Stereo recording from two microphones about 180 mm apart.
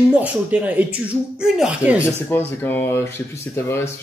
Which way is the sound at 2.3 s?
10° left (ahead or behind).